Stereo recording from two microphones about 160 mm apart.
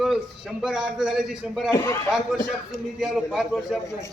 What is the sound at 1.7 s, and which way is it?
Speech, 20° left (ahead or behind).